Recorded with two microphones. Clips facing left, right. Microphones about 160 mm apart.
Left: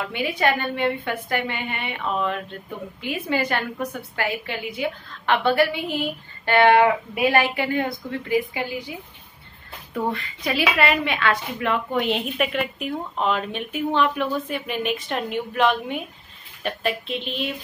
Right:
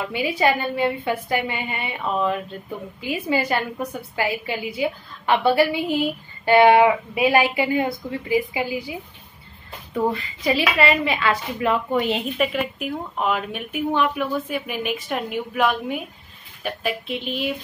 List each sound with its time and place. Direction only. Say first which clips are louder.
0.0 s a woman's voice: right 2 dB; 10° right (ahead or behind)
9.9 s a woman's voice: right 3 dB; centre (ahead or behind)